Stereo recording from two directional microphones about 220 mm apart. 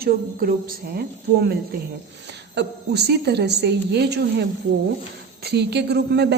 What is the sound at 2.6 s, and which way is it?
A woman's voice, 50° right (ahead or behind).